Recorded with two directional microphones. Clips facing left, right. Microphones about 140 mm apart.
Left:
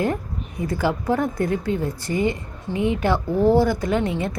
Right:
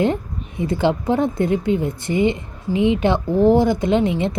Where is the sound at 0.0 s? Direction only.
25° right (ahead or behind).